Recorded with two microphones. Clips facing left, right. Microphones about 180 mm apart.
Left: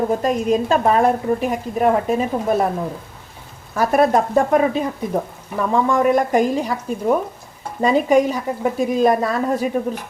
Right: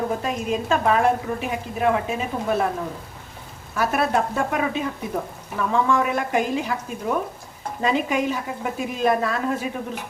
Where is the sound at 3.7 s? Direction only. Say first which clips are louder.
Left 6 dB; 40° left (ahead or behind).